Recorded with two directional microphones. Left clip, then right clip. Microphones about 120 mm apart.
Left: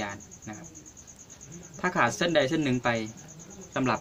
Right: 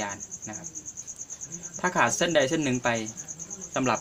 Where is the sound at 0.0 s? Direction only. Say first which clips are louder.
Right 2 dB; 25° left (ahead or behind).